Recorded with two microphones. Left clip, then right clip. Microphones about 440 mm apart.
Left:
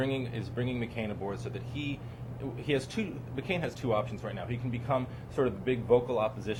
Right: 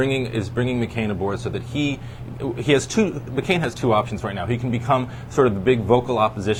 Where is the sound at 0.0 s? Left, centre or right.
Right.